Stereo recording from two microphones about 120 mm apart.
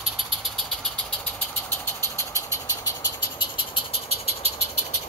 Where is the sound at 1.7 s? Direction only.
25° left (ahead or behind).